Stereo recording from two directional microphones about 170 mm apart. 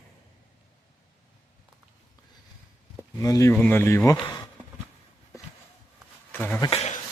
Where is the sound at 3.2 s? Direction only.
20° left (ahead or behind).